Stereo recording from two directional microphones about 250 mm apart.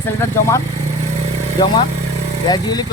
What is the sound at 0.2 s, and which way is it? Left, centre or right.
Speech, centre.